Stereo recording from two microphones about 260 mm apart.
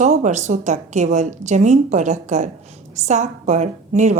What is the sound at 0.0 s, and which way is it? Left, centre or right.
Speech, right.